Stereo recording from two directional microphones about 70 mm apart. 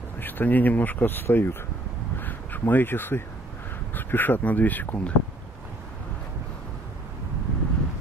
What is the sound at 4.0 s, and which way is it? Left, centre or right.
Speech, left.